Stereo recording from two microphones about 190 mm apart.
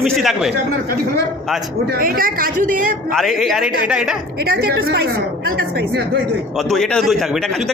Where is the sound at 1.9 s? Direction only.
50° right (ahead or behind).